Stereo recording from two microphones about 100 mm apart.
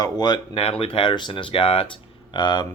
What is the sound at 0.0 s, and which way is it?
Speech, 40° left (ahead or behind).